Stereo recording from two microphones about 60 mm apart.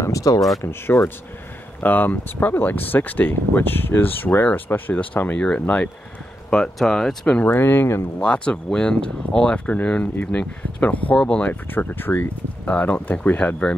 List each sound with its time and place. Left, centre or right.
0.0 s speech: left
0.6 s speech: left
1.8 s speech: left
5.4 s speech: centre
7.3 s speech: left
8.2 s speech: centre
9.8 s speech: left
11.1 s speech: centre
11.4 s speech: left
12.6 s speech: left